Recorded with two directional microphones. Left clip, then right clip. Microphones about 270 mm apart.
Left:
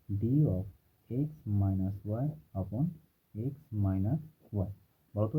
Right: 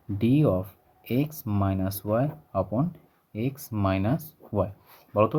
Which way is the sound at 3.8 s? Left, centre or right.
Right.